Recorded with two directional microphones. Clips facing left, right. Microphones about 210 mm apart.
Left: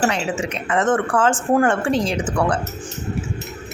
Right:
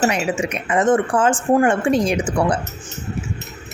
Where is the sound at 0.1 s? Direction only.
15° right (ahead or behind).